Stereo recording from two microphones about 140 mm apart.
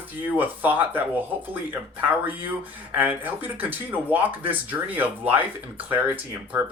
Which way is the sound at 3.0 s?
10° right (ahead or behind).